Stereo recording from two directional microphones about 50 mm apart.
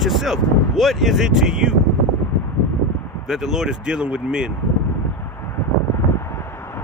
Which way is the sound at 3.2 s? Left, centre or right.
Centre.